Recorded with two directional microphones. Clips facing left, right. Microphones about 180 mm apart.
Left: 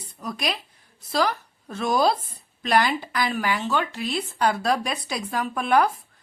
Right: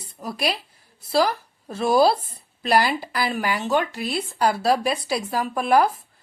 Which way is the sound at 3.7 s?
40° right (ahead or behind).